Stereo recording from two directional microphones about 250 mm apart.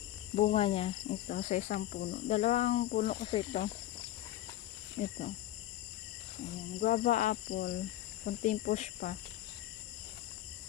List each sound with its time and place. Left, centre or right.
0.3 s cricket: left
4.9 s cricket: left
6.8 s cricket: left